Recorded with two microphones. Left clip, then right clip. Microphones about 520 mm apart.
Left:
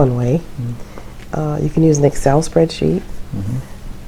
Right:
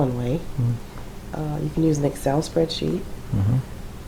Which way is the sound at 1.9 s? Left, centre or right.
Left.